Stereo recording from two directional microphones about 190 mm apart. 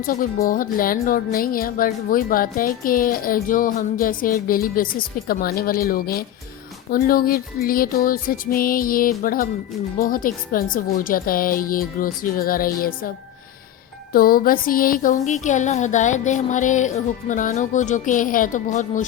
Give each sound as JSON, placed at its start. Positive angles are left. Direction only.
{"t": 0.0, "sound": "speech", "side_deg": 45}
{"t": 14.1, "sound": "music", "side_deg": 50}